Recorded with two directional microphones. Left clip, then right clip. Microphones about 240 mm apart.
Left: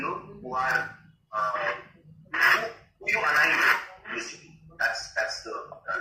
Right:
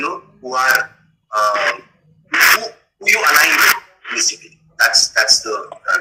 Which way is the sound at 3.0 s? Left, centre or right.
Right.